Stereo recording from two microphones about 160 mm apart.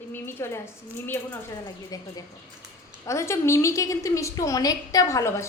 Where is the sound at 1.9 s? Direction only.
20° left (ahead or behind).